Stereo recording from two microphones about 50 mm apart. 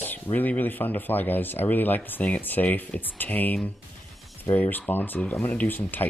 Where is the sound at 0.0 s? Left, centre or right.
Left.